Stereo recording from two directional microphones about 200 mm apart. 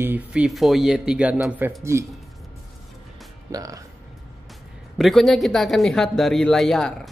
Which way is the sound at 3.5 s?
15° right (ahead or behind).